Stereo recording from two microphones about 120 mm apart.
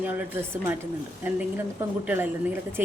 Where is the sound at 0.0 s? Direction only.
15° right (ahead or behind).